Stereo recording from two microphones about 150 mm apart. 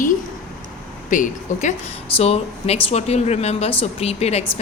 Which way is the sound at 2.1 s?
45° left (ahead or behind).